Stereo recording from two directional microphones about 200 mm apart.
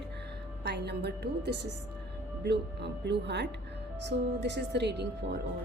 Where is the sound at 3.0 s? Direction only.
60° right (ahead or behind).